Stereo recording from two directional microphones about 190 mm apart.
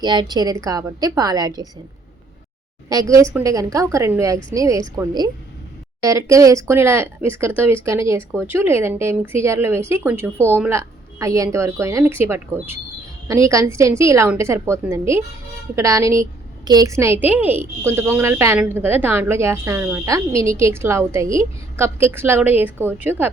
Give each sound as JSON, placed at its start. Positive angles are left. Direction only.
{"t": 0.0, "sound": "a woman's voice", "side_deg": -20}
{"t": 2.9, "sound": "a woman's voice", "side_deg": -15}